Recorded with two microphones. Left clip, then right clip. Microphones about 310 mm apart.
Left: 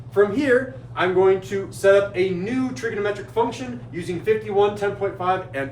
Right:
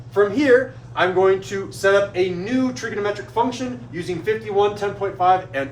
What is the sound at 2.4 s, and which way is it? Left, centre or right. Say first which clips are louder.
Speech: right 2 dB; centre.